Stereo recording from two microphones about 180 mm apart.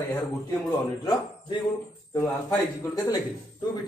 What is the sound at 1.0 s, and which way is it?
Speech, 25° left (ahead or behind).